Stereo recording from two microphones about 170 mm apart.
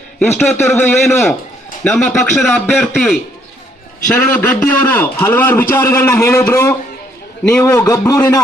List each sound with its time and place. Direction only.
0.2 s a man's voice: 10° left (ahead or behind)